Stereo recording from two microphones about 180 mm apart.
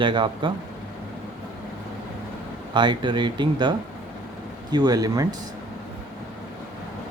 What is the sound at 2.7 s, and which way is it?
Speech, 25° right (ahead or behind).